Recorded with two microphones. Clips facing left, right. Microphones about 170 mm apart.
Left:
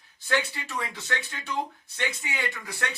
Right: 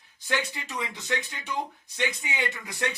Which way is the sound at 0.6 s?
20° right (ahead or behind).